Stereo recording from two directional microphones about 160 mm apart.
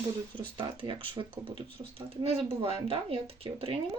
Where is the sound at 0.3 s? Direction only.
30° right (ahead or behind).